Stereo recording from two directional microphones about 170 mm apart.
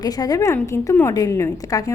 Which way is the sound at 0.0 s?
20° left (ahead or behind).